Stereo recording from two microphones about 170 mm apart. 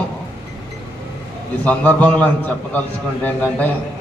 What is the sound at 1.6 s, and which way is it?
A man's voice, 10° left (ahead or behind).